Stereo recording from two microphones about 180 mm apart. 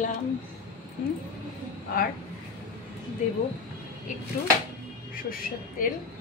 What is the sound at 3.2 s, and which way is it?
Speech, 40° left (ahead or behind).